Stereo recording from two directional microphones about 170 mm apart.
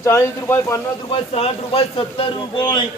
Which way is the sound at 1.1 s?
35° left (ahead or behind).